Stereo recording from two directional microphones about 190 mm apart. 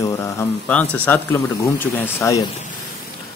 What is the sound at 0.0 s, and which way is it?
Speech, 15° left (ahead or behind).